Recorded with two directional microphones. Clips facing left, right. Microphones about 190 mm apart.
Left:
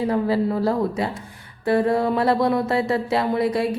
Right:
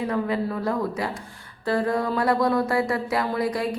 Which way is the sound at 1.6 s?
25° left (ahead or behind).